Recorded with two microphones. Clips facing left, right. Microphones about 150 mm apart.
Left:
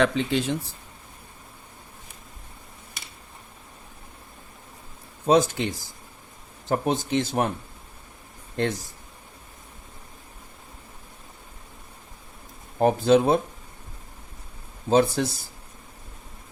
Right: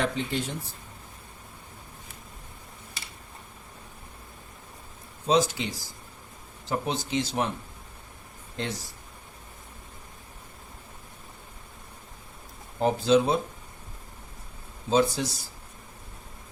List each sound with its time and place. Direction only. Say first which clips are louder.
0.0 s speech: left 6 dB; 90° left
5.2 s speech: left 4 dB; 55° left (ahead or behind)
8.5 s speech: left 7 dB; 50° left (ahead or behind)
12.8 s speech: left 3 dB; 55° left (ahead or behind)
14.8 s speech: left 3 dB; 55° left (ahead or behind)